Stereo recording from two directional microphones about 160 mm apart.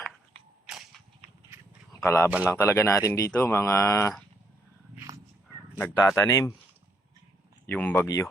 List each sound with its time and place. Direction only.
0.7 s whip: centre (ahead or behind)
2.0 s speech: 15° left (ahead or behind)
4.9 s cat: 20° right (ahead or behind)
6.0 s speech: 20° left (ahead or behind)
7.7 s speech: 10° left (ahead or behind)
8.0 s speech: 20° left (ahead or behind)